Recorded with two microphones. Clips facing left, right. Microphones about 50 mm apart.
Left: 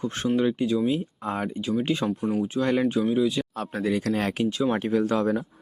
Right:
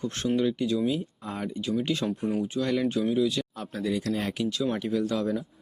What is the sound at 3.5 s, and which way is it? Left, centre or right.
Speech, left.